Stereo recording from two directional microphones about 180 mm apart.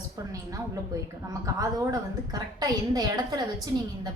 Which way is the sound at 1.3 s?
20° right (ahead or behind).